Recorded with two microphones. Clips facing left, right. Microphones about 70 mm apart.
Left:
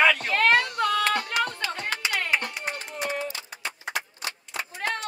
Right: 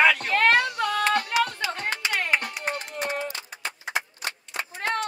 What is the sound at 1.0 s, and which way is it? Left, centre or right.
Music, centre.